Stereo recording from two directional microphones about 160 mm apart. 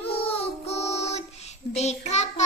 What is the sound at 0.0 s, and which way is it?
Child singing, 35° left (ahead or behind).